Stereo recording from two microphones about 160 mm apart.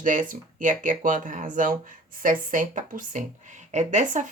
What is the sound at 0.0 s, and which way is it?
Speech, 55° right (ahead or behind).